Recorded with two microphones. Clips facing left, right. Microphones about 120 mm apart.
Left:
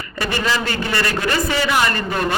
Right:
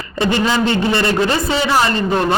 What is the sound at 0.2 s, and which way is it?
A man's voice, 20° right (ahead or behind).